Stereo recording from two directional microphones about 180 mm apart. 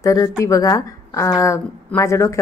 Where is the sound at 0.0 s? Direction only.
20° left (ahead or behind).